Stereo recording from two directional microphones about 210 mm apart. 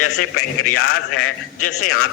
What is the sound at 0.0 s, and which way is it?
A man's voice, 90° left.